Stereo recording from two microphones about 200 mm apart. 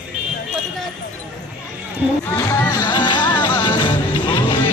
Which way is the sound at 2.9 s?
20° left (ahead or behind).